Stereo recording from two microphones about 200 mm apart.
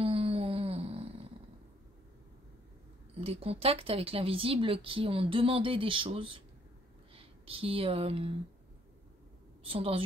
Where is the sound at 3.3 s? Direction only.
30° right (ahead or behind).